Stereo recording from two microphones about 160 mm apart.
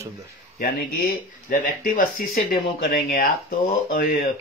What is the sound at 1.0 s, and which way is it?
Speech, 55° left (ahead or behind).